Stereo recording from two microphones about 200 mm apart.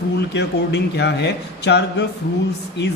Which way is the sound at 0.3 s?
60° left (ahead or behind).